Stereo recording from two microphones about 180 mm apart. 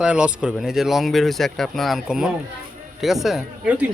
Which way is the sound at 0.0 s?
5° right (ahead or behind).